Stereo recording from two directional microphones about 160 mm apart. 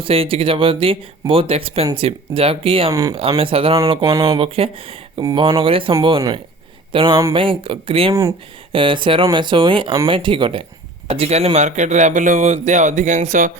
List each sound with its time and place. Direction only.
0.0 s speech: 35° right (ahead or behind)
2.9 s speech: 20° right (ahead or behind)
3.2 s speech: 35° right (ahead or behind)
4.0 s speech: 20° right (ahead or behind)
4.4 s speech: 35° right (ahead or behind)
8.1 s speech: 20° right (ahead or behind)
8.7 s a man's voice: 30° right (ahead or behind); by 13.5 s 50° right (ahead or behind)